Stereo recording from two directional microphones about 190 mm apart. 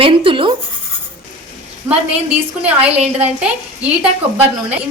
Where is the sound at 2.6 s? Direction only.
5° right (ahead or behind).